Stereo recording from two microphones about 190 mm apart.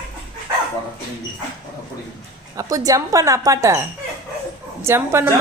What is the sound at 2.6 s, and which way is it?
Speech, 20° right (ahead or behind).